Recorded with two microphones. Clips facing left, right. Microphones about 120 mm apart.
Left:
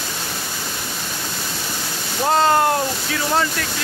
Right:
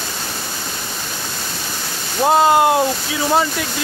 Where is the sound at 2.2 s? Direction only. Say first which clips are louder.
Right 3 dB; 15° right (ahead or behind).